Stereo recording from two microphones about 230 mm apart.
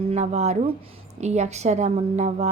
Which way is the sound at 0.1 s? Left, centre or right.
Right.